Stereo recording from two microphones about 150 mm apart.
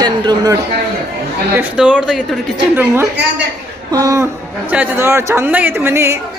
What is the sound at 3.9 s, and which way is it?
A man's voice, 25° right (ahead or behind).